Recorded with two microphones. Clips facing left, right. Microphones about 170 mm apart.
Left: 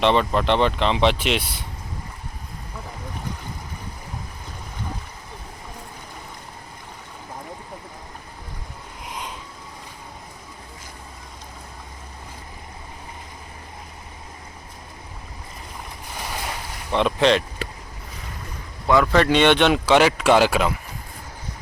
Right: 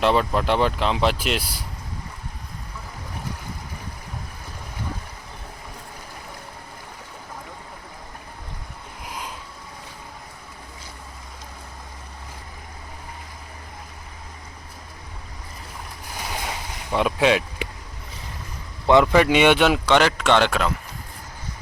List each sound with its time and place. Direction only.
0.0 s speech: 5° right (ahead or behind)
9.0 s a sound: centre (ahead or behind)
16.9 s speech: 10° right (ahead or behind)
18.9 s speech: 20° right (ahead or behind)
19.1 s speech: 10° right (ahead or behind); by 20.7 s 5° left (ahead or behind)